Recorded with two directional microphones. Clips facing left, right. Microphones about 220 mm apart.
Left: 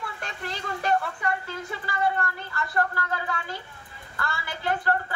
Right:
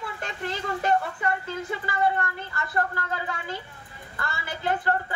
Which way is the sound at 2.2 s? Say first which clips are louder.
Left 1 dB; 20° right (ahead or behind).